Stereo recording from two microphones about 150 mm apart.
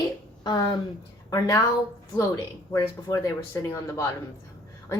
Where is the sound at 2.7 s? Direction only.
25° left (ahead or behind).